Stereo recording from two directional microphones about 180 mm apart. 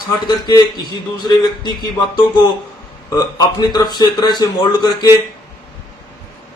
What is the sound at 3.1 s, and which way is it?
A man's voice, 20° left (ahead or behind).